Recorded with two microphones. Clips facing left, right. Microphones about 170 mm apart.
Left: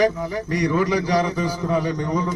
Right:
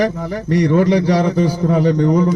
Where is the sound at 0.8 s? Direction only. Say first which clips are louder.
Right 4 dB; 65° right (ahead or behind).